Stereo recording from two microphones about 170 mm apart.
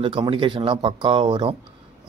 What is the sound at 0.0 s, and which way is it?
Speech, 30° right (ahead or behind).